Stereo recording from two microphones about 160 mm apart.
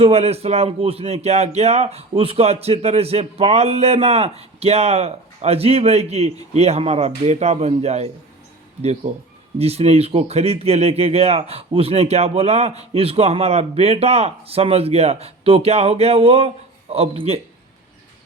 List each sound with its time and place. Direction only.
0.0 s speech: 40° right (ahead or behind)
9.6 s speech: 40° right (ahead or behind)